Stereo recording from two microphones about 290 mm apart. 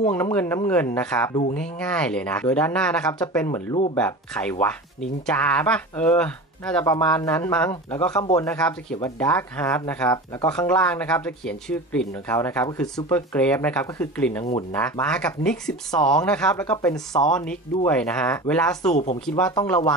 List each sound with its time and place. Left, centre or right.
0.1 s speech: centre
18.9 s speech: left
19.2 s speech: centre